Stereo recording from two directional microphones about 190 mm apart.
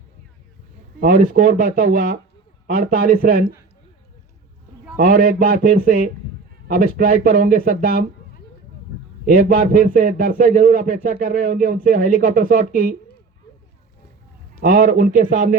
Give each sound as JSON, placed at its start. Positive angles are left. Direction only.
{"t": 0.9, "sound": "a man's voice", "side_deg": -50}
{"t": 4.9, "sound": "a man's voice", "side_deg": -50}
{"t": 9.2, "sound": "a man's voice", "side_deg": -50}
{"t": 14.6, "sound": "a man's voice", "side_deg": -50}